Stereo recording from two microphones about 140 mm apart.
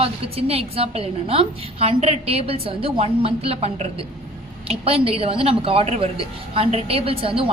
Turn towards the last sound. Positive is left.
turn(degrees=-40)  # may be behind; listen again after turning